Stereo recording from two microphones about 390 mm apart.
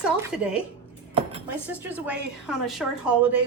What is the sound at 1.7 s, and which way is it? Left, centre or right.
Speech, centre.